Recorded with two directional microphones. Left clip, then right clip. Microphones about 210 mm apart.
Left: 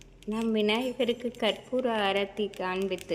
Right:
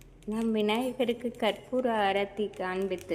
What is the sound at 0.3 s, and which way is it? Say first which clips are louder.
A woman's voice: left 1 dB; centre (ahead or behind).